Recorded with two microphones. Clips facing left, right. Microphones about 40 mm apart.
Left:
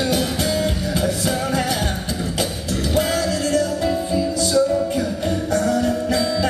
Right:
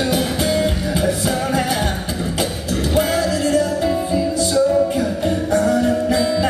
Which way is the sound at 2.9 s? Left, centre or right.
Centre.